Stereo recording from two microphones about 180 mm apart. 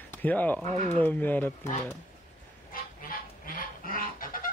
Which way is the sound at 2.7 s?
50° left (ahead or behind).